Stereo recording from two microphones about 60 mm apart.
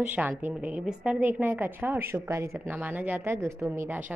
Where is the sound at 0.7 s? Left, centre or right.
Centre.